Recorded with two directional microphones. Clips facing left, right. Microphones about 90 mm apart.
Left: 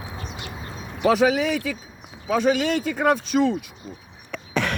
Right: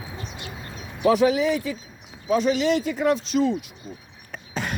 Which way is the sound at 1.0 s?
90° left.